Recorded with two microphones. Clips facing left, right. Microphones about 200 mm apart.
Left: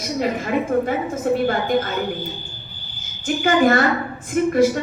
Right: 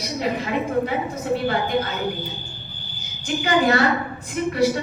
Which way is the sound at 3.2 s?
50° left (ahead or behind).